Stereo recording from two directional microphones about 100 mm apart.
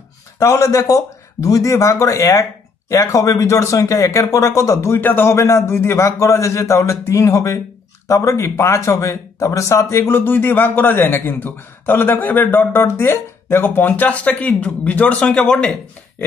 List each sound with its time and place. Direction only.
0.4 s speech: 30° left (ahead or behind); by 15.7 s 10° left (ahead or behind)